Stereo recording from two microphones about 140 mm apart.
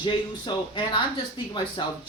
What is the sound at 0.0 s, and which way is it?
Speech, 35° left (ahead or behind).